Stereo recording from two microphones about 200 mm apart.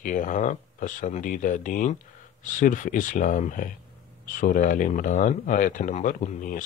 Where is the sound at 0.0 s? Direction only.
40° left (ahead or behind).